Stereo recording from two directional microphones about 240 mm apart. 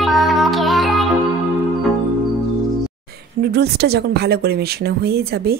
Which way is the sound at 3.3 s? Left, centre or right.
Right.